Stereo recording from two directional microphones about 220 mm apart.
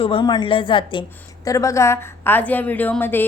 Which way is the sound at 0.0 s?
25° left (ahead or behind).